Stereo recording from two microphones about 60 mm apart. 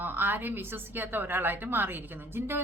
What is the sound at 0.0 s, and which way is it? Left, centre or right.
Speech, right.